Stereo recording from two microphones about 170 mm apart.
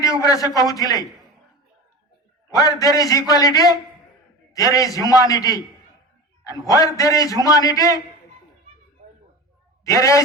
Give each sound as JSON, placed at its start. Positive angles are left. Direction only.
{"t": 0.0, "sound": "a man's voice", "side_deg": 20}
{"t": 2.5, "sound": "a man's voice", "side_deg": 20}
{"t": 9.8, "sound": "a man's voice", "side_deg": 20}